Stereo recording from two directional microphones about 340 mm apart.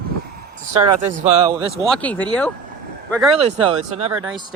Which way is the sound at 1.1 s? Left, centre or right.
Centre.